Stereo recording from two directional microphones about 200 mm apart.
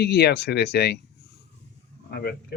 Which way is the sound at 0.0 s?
55° left (ahead or behind).